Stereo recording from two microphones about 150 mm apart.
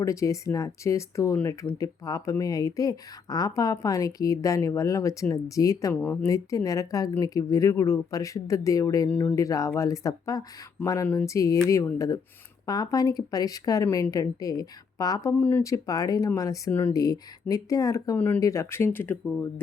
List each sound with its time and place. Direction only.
0.0 s speech: 20° left (ahead or behind)